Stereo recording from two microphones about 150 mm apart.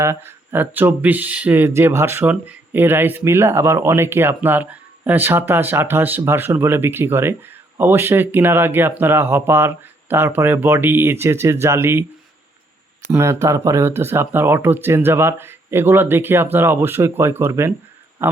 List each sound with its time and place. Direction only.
0.0 s speech: 15° right (ahead or behind)
13.1 s speech: 15° right (ahead or behind)
18.2 s a sound: 15° right (ahead or behind)